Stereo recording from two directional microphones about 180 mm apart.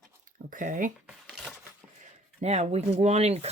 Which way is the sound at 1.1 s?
Centre (ahead or behind).